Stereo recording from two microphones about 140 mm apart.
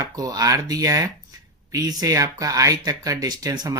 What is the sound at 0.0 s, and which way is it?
Speech, 25° right (ahead or behind).